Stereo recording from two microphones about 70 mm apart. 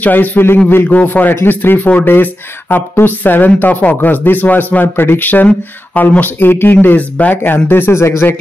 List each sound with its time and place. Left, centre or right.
0.0 s speech: left